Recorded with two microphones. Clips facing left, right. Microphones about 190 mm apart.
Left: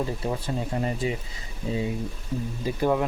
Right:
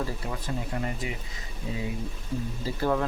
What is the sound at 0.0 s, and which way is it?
Speech, 30° left (ahead or behind).